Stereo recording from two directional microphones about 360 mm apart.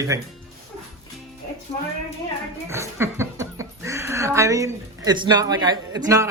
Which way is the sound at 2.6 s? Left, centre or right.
Centre.